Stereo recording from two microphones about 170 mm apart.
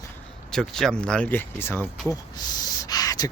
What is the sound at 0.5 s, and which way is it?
Speech, centre (ahead or behind).